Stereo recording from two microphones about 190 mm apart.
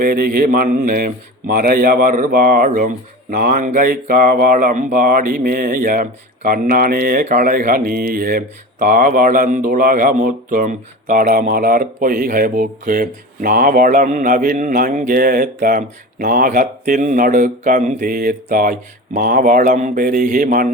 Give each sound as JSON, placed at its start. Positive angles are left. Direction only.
{"t": 0.0, "sound": "speech", "side_deg": -50}